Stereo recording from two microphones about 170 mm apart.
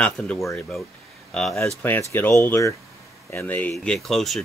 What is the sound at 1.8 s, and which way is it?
Speech, 15° left (ahead or behind).